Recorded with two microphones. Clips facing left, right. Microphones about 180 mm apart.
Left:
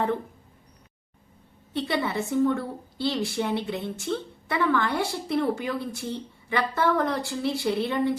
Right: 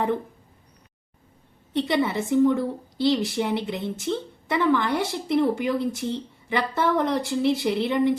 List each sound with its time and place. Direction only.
1.7 s a woman's voice: 20° right (ahead or behind)